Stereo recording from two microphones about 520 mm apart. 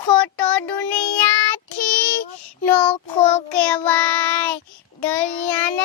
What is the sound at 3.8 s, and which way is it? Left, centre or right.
Speech, centre.